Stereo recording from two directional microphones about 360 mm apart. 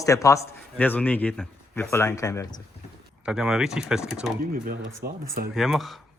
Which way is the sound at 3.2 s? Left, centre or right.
Centre.